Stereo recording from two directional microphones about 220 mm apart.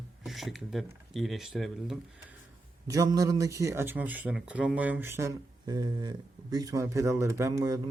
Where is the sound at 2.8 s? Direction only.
15° right (ahead or behind).